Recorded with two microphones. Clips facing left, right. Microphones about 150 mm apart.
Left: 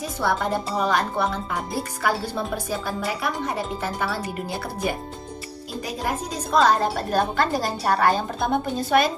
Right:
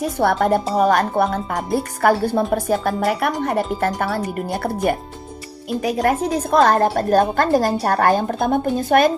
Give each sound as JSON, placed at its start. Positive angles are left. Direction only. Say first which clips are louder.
{"t": 0.2, "sound": "speech", "louder": "right 7 dB", "side_deg": -60}
{"t": 0.8, "sound": "speech", "louder": "right 6 dB", "side_deg": -45}
{"t": 3.2, "sound": "speech", "louder": "right 7 dB", "side_deg": -70}
{"t": 3.8, "sound": "speech", "louder": "right 6 dB", "side_deg": -60}